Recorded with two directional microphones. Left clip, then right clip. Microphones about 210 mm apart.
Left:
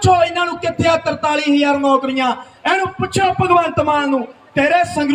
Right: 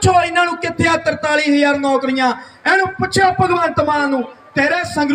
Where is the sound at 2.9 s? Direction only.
15° left (ahead or behind).